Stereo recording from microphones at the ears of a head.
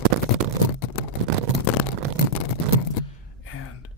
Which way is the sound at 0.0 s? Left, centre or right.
Right.